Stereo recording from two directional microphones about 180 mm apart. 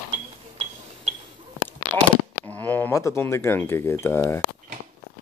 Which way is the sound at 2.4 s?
10° left (ahead or behind).